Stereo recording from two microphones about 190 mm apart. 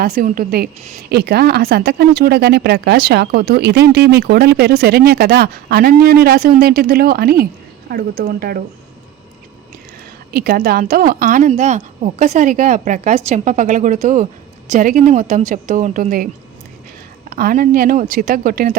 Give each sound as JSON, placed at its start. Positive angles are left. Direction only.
{"t": 0.0, "sound": "speech", "side_deg": -45}
{"t": 10.3, "sound": "a woman's voice", "side_deg": -50}